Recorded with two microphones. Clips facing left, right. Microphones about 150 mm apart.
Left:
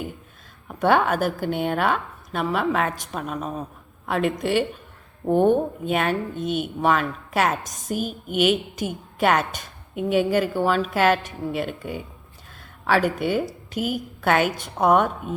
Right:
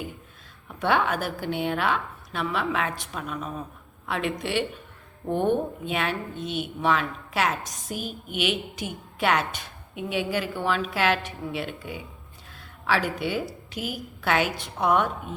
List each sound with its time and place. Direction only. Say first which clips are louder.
0.8 s a woman's voice: left 5 dB; 45° left (ahead or behind)